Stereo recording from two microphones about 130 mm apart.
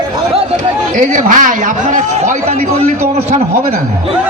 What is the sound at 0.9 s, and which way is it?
Speech, 80° right.